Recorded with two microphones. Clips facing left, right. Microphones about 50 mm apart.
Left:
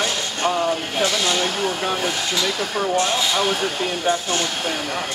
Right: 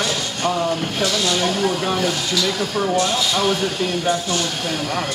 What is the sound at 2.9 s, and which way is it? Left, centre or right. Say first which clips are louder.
Speech: left 1 dB; left.